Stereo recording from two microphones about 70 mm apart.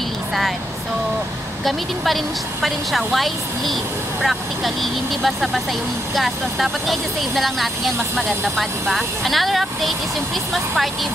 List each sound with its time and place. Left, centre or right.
1.6 s speech: centre